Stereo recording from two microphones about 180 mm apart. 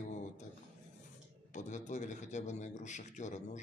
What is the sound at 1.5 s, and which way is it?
A man's voice, 40° left (ahead or behind).